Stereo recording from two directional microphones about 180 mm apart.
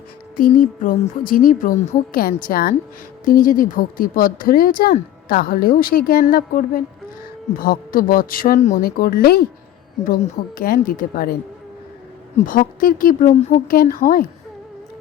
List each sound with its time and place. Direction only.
0.3 s a woman's voice: 50° left (ahead or behind)
10.6 s a woman's voice: 50° left (ahead or behind)
12.5 s a woman's voice: 50° left (ahead or behind)